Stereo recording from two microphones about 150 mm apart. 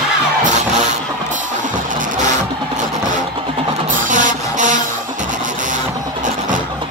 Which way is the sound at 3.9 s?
55° right (ahead or behind).